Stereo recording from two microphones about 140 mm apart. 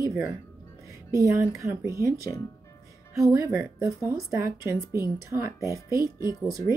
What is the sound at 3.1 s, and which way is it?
Speech, 20° right (ahead or behind).